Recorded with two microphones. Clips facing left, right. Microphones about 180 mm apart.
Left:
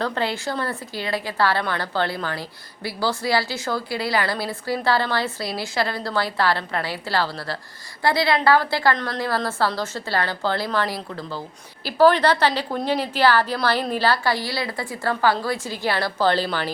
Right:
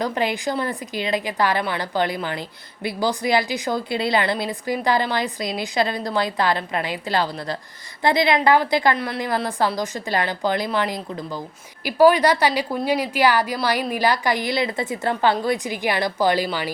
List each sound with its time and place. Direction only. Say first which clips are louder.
0.0 s a woman's voice: right 2 dB; 15° right (ahead or behind)